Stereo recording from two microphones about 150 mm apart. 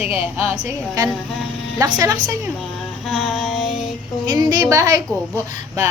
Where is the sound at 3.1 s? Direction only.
5° right (ahead or behind).